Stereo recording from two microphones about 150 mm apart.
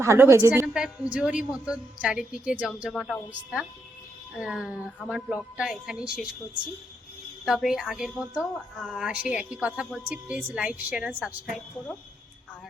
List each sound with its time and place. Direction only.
0.0 s a woman's voice: 20° right (ahead or behind); by 6.2 s 5° right (ahead or behind)
7.4 s a woman's voice: 5° right (ahead or behind)